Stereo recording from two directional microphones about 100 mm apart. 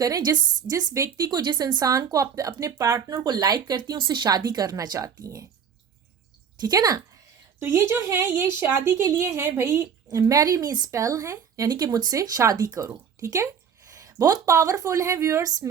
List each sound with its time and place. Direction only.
0.0 s a woman's voice: 40° right (ahead or behind)
6.6 s a woman's voice: 40° right (ahead or behind)
7.6 s speech: 25° right (ahead or behind)
10.1 s a woman's voice: 35° right (ahead or behind)